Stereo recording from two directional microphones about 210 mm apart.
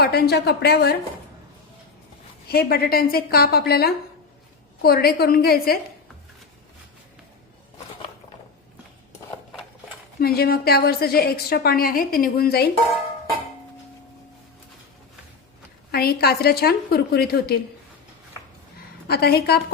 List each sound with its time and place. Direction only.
0.0 s a woman's voice: 50° left (ahead or behind)
2.5 s a woman's voice: 45° left (ahead or behind)
10.2 s a woman's voice: 50° left (ahead or behind)
15.9 s a woman's voice: 50° left (ahead or behind)
19.0 s a woman's voice: 50° left (ahead or behind)